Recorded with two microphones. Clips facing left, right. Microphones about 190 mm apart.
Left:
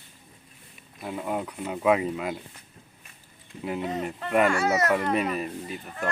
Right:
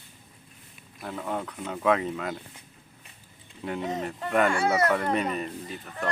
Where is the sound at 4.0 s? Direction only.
5° left (ahead or behind).